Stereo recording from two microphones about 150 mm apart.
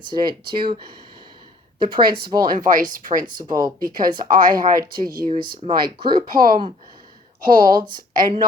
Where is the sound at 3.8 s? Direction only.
70° right (ahead or behind).